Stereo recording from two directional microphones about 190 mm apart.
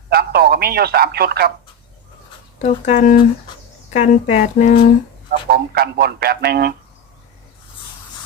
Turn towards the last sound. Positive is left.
turn(degrees=-55)  # may be behind; listen again after turning